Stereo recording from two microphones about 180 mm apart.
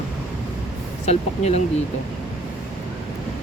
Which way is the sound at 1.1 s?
35° left (ahead or behind).